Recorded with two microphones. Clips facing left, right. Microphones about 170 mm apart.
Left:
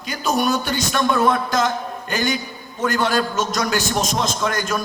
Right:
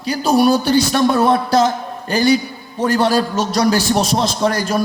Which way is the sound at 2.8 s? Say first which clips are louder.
Right 5 dB; 35° right (ahead or behind).